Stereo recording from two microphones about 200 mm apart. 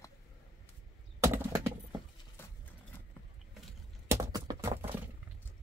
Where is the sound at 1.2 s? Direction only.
10° right (ahead or behind).